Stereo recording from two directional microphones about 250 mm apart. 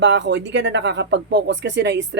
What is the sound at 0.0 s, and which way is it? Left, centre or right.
Speech, right.